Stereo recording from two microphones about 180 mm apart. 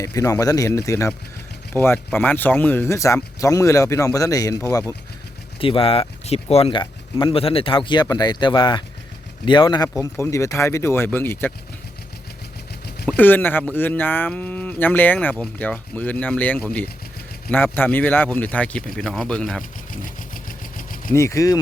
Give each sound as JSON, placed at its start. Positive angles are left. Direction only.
{"t": 0.0, "sound": "speech", "side_deg": 15}
{"t": 5.5, "sound": "speech", "side_deg": 30}
{"t": 13.1, "sound": "speech", "side_deg": 10}
{"t": 19.9, "sound": "sewing machine", "side_deg": 50}
{"t": 21.1, "sound": "speech", "side_deg": 15}